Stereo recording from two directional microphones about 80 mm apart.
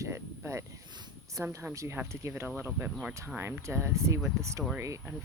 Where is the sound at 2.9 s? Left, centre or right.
Centre.